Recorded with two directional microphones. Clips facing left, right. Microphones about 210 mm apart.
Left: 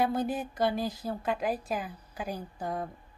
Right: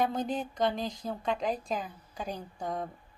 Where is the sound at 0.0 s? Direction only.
10° left (ahead or behind).